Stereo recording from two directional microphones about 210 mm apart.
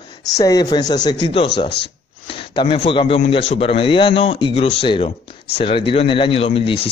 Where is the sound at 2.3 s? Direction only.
25° left (ahead or behind).